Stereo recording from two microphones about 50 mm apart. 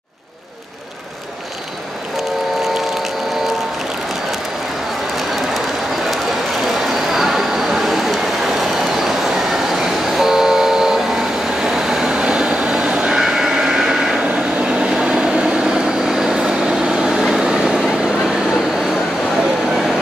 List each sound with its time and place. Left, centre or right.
6.9 s vehicle: centre
11.6 s train: centre
14.6 s vehicle: centre